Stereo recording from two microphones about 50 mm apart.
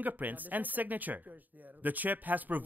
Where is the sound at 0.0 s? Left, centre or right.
Right.